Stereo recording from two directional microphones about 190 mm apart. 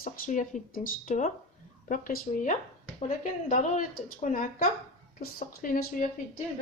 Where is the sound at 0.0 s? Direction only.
40° left (ahead or behind).